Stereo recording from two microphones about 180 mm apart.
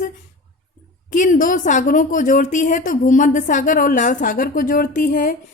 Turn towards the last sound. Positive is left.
turn(degrees=50)  # may be behind; listen again after turning